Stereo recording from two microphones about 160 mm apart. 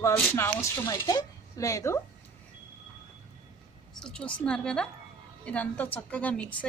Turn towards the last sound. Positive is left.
turn(degrees=10)  # may be behind; listen again after turning